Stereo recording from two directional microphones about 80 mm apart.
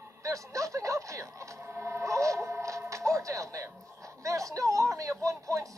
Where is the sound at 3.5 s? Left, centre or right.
Right.